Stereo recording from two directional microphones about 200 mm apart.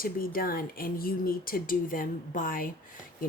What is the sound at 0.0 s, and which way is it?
Speech, 45° left (ahead or behind).